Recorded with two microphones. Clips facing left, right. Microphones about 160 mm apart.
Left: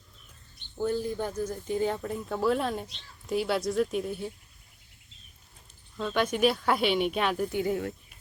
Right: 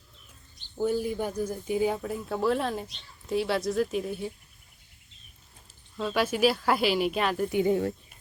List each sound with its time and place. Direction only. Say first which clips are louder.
0.8 s speech: right 2 dB; 10° right (ahead or behind)
6.0 s speech: right 1 dB; 5° right (ahead or behind)
7.5 s speech: right 4 dB; 25° right (ahead or behind)